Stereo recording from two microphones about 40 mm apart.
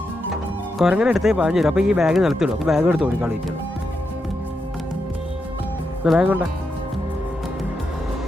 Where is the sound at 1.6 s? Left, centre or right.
Centre.